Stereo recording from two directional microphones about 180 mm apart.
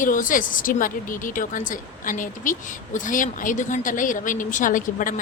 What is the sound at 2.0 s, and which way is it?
Speech, 45° left (ahead or behind).